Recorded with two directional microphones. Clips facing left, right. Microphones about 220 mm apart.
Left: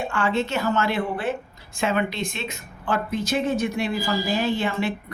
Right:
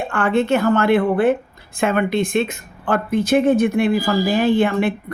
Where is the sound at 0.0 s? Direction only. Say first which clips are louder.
Right 5 dB; 55° right (ahead or behind).